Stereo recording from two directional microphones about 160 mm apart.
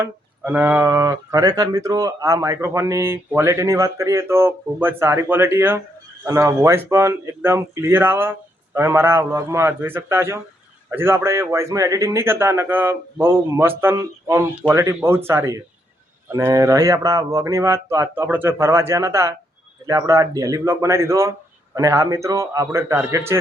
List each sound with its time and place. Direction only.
0.0 s speech: 15° right (ahead or behind)